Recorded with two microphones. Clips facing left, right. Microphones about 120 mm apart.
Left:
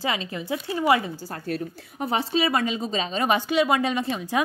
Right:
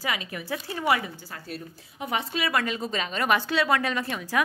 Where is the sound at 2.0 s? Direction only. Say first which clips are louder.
Left 5 dB; 30° left (ahead or behind).